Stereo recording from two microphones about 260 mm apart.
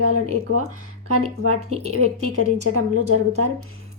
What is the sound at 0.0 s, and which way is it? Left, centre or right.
Speech, right.